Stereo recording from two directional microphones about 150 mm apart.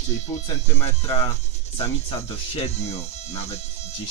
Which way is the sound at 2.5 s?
45° left (ahead or behind).